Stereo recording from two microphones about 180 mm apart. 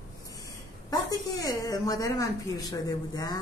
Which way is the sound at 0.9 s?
20° left (ahead or behind).